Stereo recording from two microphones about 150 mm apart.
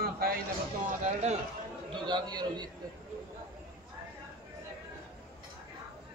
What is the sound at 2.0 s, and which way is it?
Speech, 30° right (ahead or behind).